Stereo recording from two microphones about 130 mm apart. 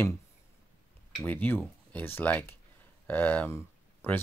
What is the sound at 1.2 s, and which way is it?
Speech, 15° left (ahead or behind).